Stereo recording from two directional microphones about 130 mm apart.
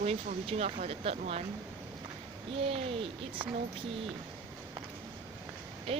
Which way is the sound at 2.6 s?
45° right (ahead or behind).